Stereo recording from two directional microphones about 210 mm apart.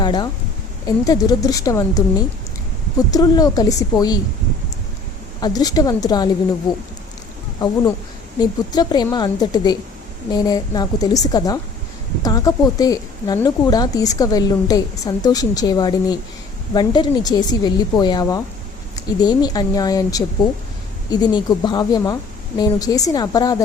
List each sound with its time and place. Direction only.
0.0 s speech: 20° left (ahead or behind)
5.4 s a woman's voice: 20° left (ahead or behind)
7.6 s a woman's voice: 20° left (ahead or behind)